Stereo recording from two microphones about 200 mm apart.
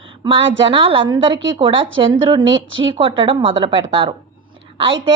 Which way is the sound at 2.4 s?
70° right (ahead or behind).